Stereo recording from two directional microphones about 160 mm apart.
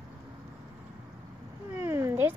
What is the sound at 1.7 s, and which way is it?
Cat, 15° right (ahead or behind).